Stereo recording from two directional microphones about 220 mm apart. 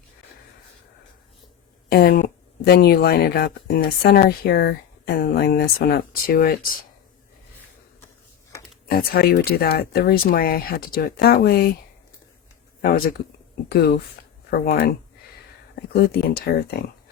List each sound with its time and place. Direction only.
1.9 s speech: 45° left (ahead or behind)
8.9 s speech: 45° left (ahead or behind)
13.7 s speech: 45° left (ahead or behind)